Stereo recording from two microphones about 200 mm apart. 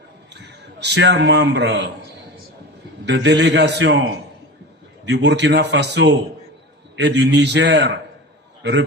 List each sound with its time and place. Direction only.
0.3 s a man's voice: 60° right (ahead or behind)
3.1 s a man's voice: 60° right (ahead or behind)